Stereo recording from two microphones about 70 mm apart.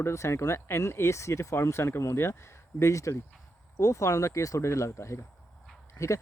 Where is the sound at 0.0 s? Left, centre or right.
Left.